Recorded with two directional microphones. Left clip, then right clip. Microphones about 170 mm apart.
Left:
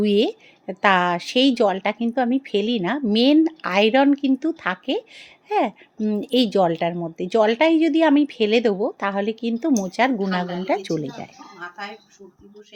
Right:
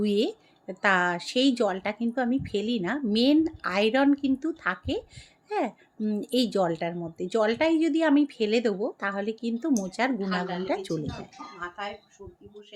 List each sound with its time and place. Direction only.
0.0 s speech: 40° left (ahead or behind)